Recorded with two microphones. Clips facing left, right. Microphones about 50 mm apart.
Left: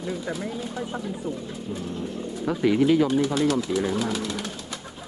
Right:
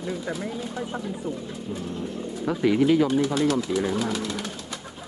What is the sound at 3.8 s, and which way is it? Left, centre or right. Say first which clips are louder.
Speech: even; centre.